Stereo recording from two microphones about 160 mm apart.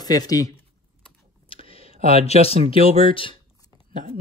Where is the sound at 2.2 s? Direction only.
40° left (ahead or behind).